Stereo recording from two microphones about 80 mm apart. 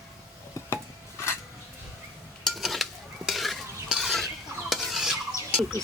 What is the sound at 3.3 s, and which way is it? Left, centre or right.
Stir, centre.